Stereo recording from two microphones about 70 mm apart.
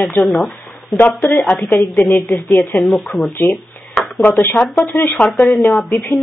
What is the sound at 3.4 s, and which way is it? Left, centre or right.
A woman's voice, left.